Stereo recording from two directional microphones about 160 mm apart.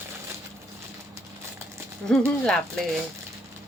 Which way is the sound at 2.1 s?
5° left (ahead or behind).